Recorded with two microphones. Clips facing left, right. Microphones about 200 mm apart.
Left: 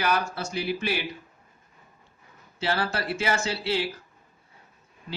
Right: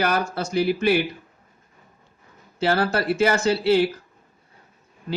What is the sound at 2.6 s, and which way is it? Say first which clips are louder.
Speech: right 7 dB; 50° right (ahead or behind).